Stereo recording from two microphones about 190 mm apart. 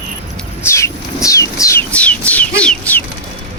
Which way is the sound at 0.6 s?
15° left (ahead or behind).